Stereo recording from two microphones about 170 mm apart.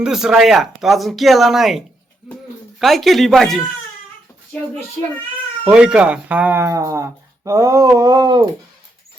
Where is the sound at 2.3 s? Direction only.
Centre (ahead or behind).